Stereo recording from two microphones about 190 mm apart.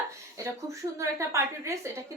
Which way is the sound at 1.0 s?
15° right (ahead or behind).